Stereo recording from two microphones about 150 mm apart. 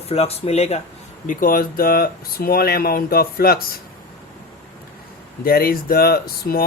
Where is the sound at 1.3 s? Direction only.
65° left (ahead or behind); by 3.6 s 90° left.